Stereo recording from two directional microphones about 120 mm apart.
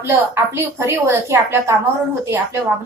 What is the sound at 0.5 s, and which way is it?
A woman's voice, 20° right (ahead or behind).